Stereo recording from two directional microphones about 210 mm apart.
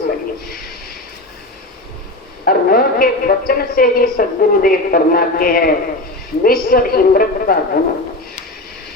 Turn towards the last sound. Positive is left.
turn(degrees=45)  # may be behind; listen again after turning